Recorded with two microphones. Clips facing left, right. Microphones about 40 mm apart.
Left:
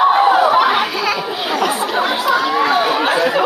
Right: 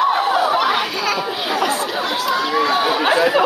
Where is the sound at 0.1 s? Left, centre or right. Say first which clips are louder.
Left 5 dB; centre.